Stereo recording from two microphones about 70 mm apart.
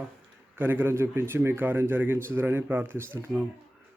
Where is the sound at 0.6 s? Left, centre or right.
Right.